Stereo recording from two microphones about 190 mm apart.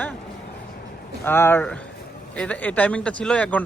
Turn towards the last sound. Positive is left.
turn(degrees=5)  # may be behind; listen again after turning